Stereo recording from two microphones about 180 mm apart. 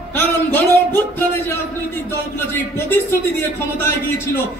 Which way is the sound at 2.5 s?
15° left (ahead or behind).